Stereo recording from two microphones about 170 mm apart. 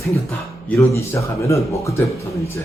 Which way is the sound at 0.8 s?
15° left (ahead or behind).